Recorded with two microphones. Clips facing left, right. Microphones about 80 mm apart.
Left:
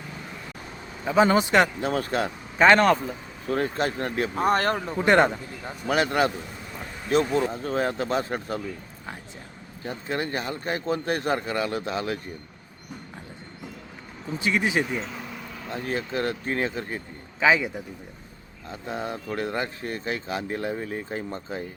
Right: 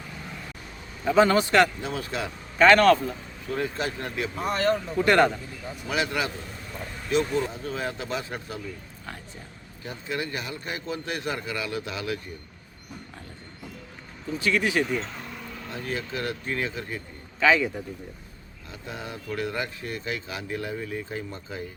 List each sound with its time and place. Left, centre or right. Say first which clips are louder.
1.0 s a man's voice: even; centre
1.8 s speech: left 5 dB; left
2.6 s a man's voice: right 1 dB; left
3.4 s speech: left 4 dB; left
4.9 s a man's voice: left 2 dB; left
5.6 s speech: left 4 dB; left
7.3 s speech: left 4 dB; left
9.8 s speech: left 3 dB; left
14.3 s a man's voice: even; left
14.9 s vehicle: even; centre
15.7 s speech: left 4 dB; left
17.4 s speech: even; centre
18.7 s speech: left 6 dB; left